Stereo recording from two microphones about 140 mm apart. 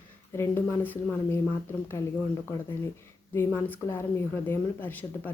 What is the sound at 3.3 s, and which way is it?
Speech, 15° left (ahead or behind).